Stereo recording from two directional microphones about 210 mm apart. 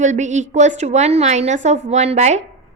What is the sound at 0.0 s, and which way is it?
A woman's voice, 35° right (ahead or behind).